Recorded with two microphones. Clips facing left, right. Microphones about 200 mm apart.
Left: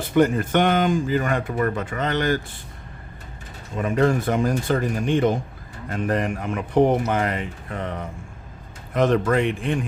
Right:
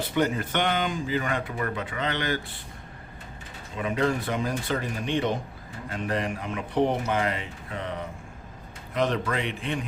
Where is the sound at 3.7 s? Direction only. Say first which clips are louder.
Left 6 dB; 45° left (ahead or behind).